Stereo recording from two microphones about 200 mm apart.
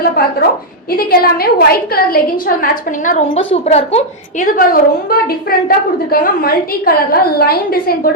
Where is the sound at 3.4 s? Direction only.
30° left (ahead or behind); by 8.0 s 50° left (ahead or behind).